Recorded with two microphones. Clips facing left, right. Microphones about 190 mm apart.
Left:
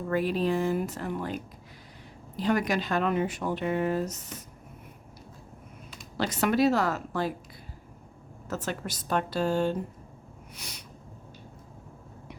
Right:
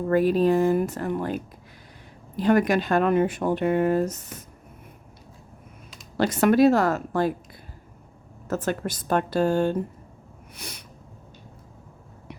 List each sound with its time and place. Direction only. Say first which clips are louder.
0.1 s speech: right 7 dB; 45° right (ahead or behind)
6.1 s speech: right 7 dB; 50° right (ahead or behind)
8.4 s speech: right 7 dB; 50° right (ahead or behind)